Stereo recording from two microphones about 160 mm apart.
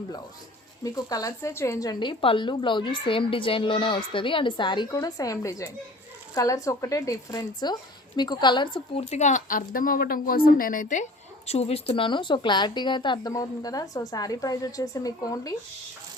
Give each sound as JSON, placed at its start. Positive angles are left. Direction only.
{"t": 0.9, "sound": "a woman's voice", "side_deg": 20}
{"t": 11.4, "sound": "a woman's voice", "side_deg": 40}